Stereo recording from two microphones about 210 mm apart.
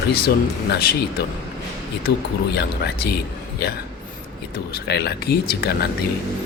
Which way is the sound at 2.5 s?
50° left (ahead or behind).